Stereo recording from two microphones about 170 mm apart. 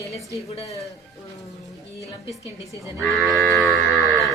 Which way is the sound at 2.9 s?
Centre (ahead or behind).